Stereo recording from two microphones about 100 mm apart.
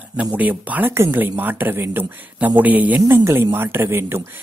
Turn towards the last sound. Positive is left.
turn(degrees=-25)  # may be behind; listen again after turning